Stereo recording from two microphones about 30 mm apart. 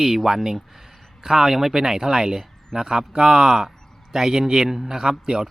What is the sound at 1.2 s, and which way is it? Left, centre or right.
Speech, right.